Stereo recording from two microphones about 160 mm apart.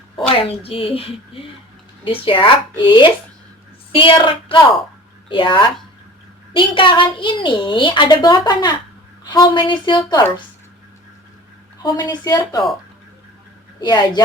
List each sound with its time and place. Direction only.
0.3 s a woman's voice: 35° left (ahead or behind)
11.8 s speech: 25° left (ahead or behind)
13.8 s speech: 25° left (ahead or behind)